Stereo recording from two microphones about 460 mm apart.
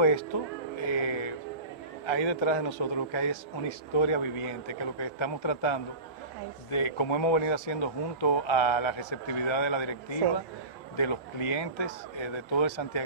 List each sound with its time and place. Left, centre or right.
0.0 s speech: left
2.0 s a man's voice: left
11.0 s speech: left